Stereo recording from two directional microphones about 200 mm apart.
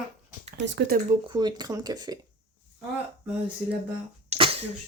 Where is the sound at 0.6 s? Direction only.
60° right (ahead or behind).